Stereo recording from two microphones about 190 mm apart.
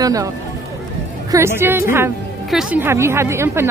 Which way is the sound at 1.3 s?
10° right (ahead or behind).